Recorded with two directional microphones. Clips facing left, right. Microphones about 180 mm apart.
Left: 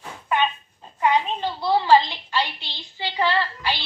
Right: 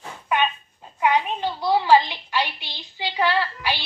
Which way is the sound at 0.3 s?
15° right (ahead or behind).